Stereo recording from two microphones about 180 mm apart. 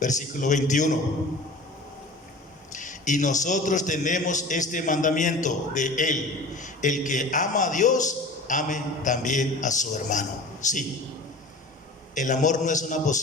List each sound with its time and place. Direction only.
0.0 s a man's voice: 45° left (ahead or behind)
2.7 s a man's voice: 45° left (ahead or behind)
12.1 s a man's voice: 45° left (ahead or behind)